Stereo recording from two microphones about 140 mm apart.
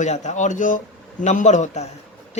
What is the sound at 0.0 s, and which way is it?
Speech, 55° left (ahead or behind).